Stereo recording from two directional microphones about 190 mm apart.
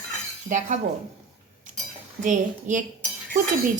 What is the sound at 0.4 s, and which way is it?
Speech, 40° right (ahead or behind).